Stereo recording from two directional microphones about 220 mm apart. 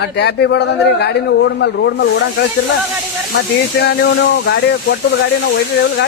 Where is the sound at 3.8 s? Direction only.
45° left (ahead or behind).